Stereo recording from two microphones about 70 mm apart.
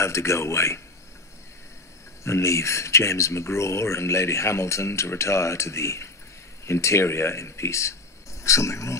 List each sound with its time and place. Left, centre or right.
0.0 s speech: left
2.2 s speech: left